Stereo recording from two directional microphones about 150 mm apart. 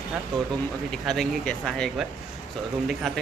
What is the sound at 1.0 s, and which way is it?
Speech, centre (ahead or behind).